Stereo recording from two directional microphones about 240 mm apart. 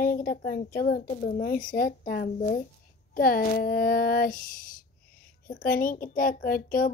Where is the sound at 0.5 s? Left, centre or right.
Left.